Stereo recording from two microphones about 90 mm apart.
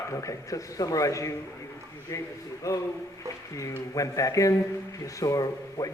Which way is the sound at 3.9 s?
40° left (ahead or behind).